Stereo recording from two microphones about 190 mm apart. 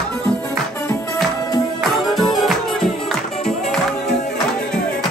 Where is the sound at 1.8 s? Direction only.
Centre (ahead or behind).